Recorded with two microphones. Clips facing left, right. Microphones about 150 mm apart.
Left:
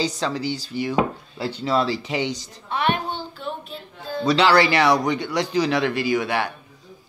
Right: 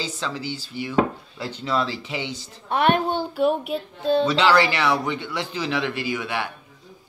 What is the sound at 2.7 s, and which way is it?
Speech, 50° right (ahead or behind).